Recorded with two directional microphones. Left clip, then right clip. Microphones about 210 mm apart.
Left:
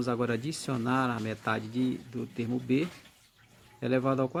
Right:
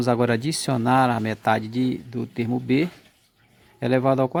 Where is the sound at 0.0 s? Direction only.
45° right (ahead or behind).